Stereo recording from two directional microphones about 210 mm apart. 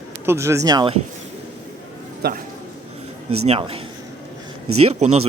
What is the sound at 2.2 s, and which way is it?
Speech, 45° right (ahead or behind).